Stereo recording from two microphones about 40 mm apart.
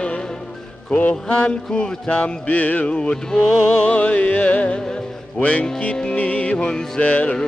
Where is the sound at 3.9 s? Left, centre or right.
Left.